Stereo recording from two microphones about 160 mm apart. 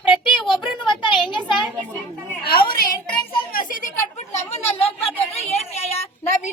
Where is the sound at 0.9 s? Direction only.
30° left (ahead or behind).